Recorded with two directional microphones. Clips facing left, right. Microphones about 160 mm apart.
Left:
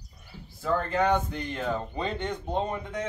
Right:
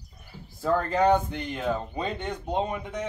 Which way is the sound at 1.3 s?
15° right (ahead or behind).